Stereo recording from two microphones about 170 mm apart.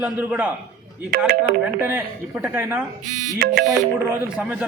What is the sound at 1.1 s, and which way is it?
Speech, 60° right (ahead or behind).